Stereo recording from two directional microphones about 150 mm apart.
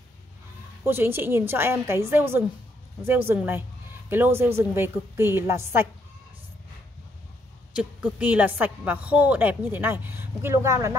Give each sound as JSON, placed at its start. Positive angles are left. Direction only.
{"t": 0.8, "sound": "a woman's voice", "side_deg": -15}
{"t": 7.7, "sound": "a woman's voice", "side_deg": -10}